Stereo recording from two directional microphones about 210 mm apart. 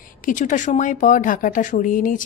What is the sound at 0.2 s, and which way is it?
Speech, 40° left (ahead or behind).